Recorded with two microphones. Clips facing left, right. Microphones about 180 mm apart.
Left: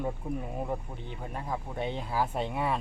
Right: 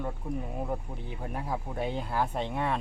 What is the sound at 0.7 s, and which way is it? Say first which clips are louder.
Speech: even; centre (ahead or behind).